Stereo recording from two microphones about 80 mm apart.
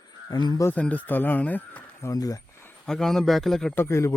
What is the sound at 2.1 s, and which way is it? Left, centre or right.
Speech, left.